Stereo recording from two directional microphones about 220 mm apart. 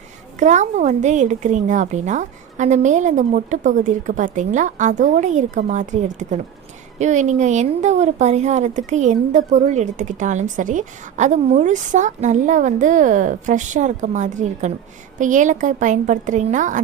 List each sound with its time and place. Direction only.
0.3 s a woman's voice: 35° right (ahead or behind)